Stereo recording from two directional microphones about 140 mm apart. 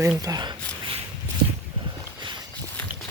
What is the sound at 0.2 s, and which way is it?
Speech, 25° right (ahead or behind).